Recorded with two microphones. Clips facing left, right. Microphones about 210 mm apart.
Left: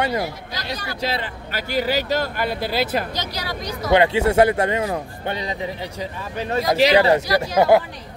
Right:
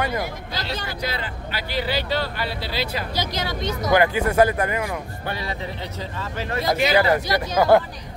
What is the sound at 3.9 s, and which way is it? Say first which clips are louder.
A man's voice: left 3 dB; 25° left (ahead or behind).